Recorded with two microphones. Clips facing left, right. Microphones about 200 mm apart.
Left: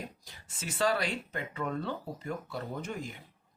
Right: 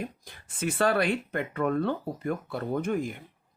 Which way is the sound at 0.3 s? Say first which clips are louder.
Right 11 dB; 55° right (ahead or behind).